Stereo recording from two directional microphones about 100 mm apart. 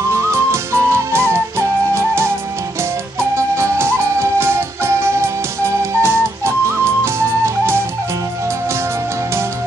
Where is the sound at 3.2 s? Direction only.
25° right (ahead or behind).